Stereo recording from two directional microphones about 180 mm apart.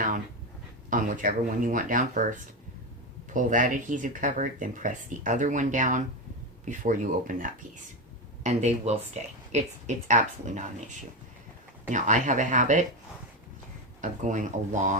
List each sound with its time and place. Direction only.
0.9 s speech: 45° right (ahead or behind)
3.2 s speech: 45° right (ahead or behind)
14.0 s speech: 45° right (ahead or behind)